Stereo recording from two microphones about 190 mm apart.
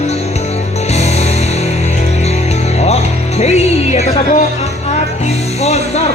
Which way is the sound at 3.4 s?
35° left (ahead or behind).